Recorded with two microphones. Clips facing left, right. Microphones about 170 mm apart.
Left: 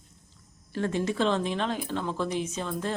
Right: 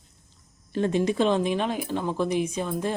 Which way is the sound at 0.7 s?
20° right (ahead or behind).